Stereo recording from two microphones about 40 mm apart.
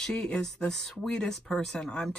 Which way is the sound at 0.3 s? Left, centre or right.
Left.